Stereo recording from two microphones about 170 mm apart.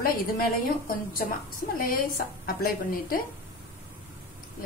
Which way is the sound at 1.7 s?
55° left (ahead or behind).